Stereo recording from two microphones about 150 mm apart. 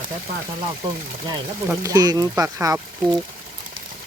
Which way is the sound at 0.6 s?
30° right (ahead or behind).